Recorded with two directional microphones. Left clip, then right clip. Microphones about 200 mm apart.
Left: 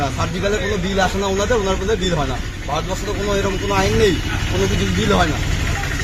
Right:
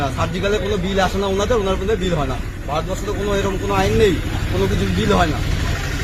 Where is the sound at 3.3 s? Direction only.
Centre (ahead or behind).